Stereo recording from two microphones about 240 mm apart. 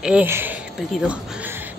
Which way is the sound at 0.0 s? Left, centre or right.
Centre.